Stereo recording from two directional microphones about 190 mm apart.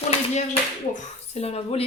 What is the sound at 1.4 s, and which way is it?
Speech, 30° left (ahead or behind).